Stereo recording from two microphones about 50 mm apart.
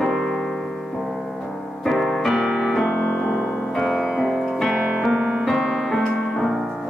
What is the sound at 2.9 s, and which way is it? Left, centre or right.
Music, centre.